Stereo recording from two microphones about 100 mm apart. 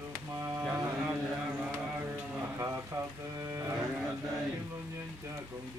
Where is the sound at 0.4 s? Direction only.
25° right (ahead or behind).